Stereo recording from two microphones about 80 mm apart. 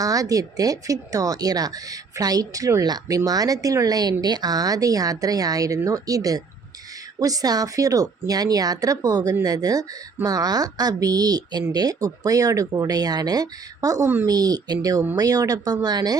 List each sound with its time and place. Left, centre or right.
0.0 s speech: right